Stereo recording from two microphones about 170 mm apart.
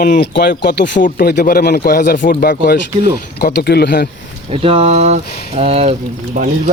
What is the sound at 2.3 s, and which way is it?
Speech, 55° left (ahead or behind).